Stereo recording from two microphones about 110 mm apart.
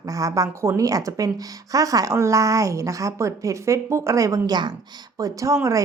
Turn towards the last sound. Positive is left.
turn(degrees=-30)  # may be behind; listen again after turning